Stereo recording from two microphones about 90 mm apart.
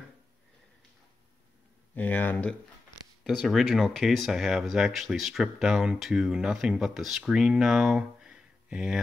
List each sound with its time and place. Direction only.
2.0 s speech: 20° left (ahead or behind)
3.3 s speech: centre (ahead or behind)